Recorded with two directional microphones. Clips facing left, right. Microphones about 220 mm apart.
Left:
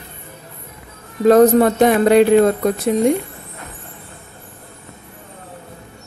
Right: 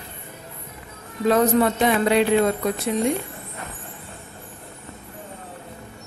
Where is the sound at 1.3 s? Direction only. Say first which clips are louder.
Left 8 dB; 40° left (ahead or behind).